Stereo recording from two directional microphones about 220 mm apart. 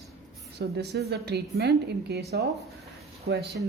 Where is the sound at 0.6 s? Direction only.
50° right (ahead or behind).